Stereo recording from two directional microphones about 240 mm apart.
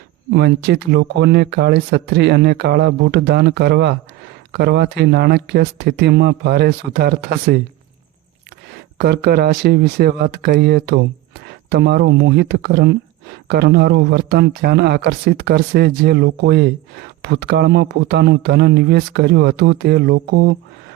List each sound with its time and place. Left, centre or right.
0.3 s speech: right
8.7 s speech: right